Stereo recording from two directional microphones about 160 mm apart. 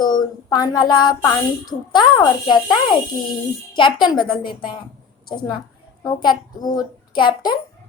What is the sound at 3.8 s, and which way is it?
Speech, 30° left (ahead or behind).